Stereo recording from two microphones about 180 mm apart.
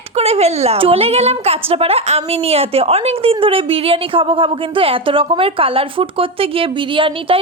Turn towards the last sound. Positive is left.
turn(degrees=-30)  # may be behind; listen again after turning